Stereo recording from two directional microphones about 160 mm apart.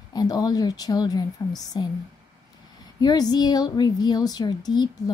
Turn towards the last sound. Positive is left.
turn(degrees=25)  # may be behind; listen again after turning